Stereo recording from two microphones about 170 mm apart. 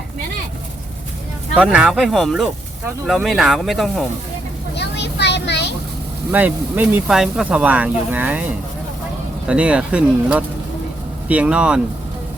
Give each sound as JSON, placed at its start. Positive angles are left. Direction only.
{"t": 1.5, "sound": "speech", "side_deg": -5}
{"t": 4.7, "sound": "vehicle", "side_deg": 85}
{"t": 6.3, "sound": "speech", "side_deg": -10}